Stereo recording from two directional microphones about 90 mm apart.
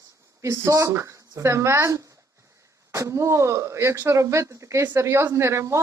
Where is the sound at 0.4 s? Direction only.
35° right (ahead or behind).